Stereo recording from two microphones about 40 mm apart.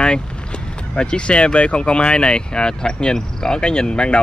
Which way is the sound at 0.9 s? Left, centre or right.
Left.